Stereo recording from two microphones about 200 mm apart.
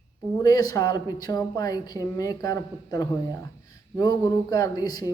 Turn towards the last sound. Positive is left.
turn(degrees=20)  # may be behind; listen again after turning